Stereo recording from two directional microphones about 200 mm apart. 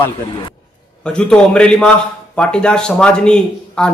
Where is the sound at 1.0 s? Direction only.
5° left (ahead or behind).